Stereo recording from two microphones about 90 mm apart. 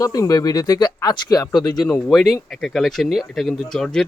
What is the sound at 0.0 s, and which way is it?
Speech, 40° left (ahead or behind).